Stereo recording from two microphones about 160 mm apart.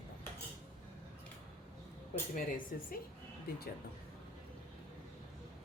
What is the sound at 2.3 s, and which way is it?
Speech, 60° left (ahead or behind).